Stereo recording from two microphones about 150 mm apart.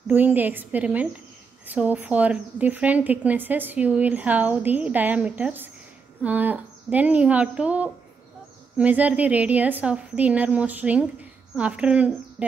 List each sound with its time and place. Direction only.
0.1 s a woman's voice: 10° right (ahead or behind)